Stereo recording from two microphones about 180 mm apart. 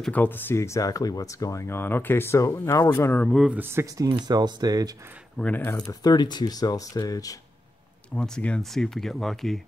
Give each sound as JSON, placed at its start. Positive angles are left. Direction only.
{"t": 0.0, "sound": "speech", "side_deg": 10}
{"t": 3.5, "sound": "speech", "side_deg": -15}
{"t": 5.4, "sound": "speech", "side_deg": 10}
{"t": 8.1, "sound": "speech", "side_deg": 5}